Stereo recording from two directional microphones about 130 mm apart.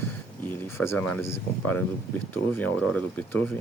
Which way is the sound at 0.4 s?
15° left (ahead or behind).